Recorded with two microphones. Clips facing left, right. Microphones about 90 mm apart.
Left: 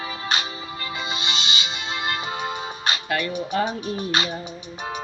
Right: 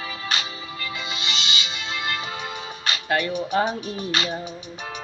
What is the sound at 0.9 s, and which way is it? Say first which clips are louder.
Music: left 3 dB; 25° left (ahead or behind).